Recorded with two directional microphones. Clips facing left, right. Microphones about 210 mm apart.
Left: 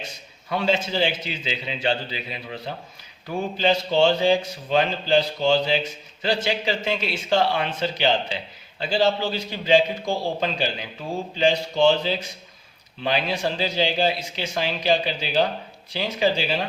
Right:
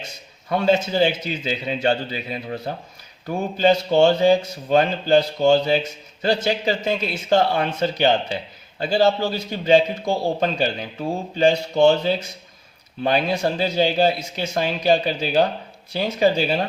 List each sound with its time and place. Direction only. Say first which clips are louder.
0.5 s speech: right 4 dB; 45° right (ahead or behind)